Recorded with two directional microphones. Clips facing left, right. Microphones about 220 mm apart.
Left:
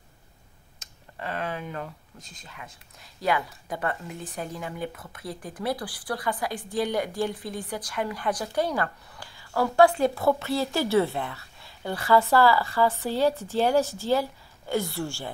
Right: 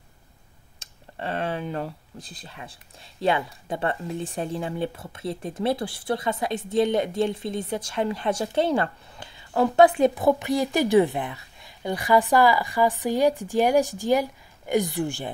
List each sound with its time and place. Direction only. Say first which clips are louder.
0.7 s a woman's voice: right 3 dB; 30° right (ahead or behind)